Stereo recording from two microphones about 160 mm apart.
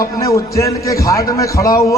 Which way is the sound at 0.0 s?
20° left (ahead or behind).